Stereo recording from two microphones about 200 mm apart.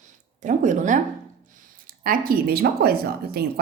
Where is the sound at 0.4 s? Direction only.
40° right (ahead or behind).